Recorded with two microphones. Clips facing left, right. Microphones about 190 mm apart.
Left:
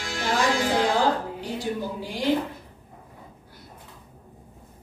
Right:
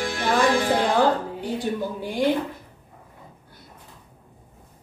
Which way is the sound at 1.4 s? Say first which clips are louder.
Right 3 dB; 55° right (ahead or behind).